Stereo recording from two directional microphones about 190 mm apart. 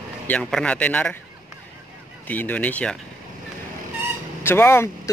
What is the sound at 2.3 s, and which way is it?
Speech, 10° left (ahead or behind).